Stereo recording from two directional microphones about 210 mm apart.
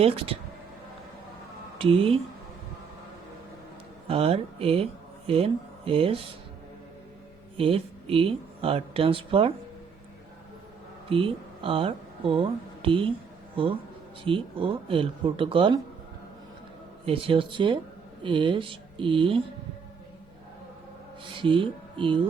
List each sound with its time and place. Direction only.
0.0 s speech: 25° right (ahead or behind)
1.8 s speech: 25° right (ahead or behind)
4.1 s speech: 25° right (ahead or behind)
7.5 s speech: 25° right (ahead or behind)
11.1 s speech: 25° right (ahead or behind)
14.3 s speech: 25° right (ahead or behind)
17.1 s speech: 25° right (ahead or behind)
21.4 s speech: 25° right (ahead or behind)